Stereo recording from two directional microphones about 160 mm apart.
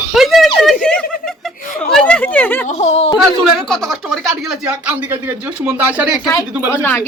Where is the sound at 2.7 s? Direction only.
45° left (ahead or behind).